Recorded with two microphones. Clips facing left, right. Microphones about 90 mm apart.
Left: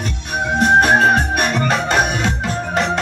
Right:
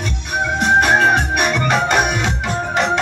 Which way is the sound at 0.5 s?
40° left (ahead or behind).